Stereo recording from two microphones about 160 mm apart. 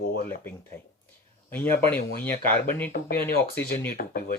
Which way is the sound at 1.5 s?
10° left (ahead or behind).